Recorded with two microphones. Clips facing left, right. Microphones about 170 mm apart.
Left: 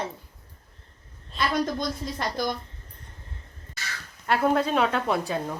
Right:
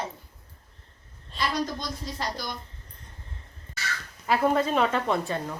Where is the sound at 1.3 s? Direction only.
Centre (ahead or behind).